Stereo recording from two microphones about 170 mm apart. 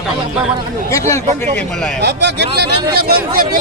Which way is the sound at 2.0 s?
85° right.